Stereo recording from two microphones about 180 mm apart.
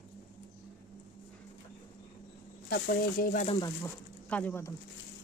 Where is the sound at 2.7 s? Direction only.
60° left (ahead or behind).